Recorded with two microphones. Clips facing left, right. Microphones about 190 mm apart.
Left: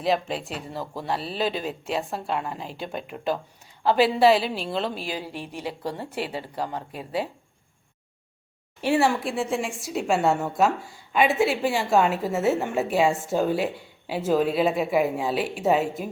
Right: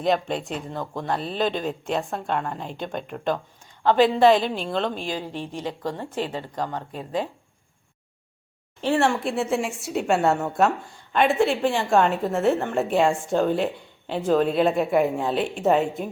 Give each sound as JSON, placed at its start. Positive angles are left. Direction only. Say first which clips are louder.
{"t": 0.0, "sound": "a woman's voice", "louder": "right 2 dB", "side_deg": 5}
{"t": 8.8, "sound": "a woman's voice", "louder": "even", "side_deg": 5}